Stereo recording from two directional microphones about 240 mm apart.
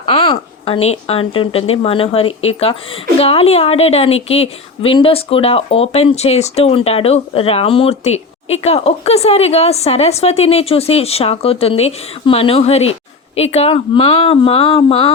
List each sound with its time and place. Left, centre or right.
0.0 s a woman's voice: left